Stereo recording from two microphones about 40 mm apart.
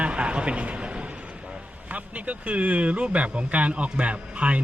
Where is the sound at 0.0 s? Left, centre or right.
Right.